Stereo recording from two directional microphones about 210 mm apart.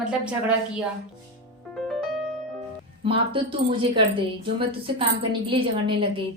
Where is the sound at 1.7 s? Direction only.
Centre (ahead or behind).